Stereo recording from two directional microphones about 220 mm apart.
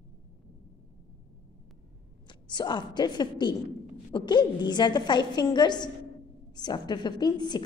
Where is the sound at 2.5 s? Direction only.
20° left (ahead or behind).